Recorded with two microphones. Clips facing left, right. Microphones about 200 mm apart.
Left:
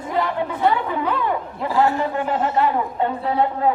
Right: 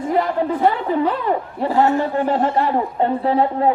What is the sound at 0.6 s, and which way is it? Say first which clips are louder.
A man's voice: right 2 dB; 35° right (ahead or behind).